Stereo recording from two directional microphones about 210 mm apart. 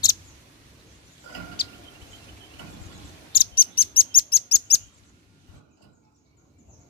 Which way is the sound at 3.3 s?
45° left (ahead or behind).